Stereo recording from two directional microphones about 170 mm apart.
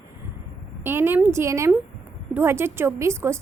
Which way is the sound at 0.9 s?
15° right (ahead or behind).